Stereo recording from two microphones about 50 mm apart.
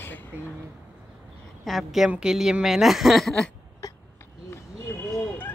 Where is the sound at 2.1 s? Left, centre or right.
Centre.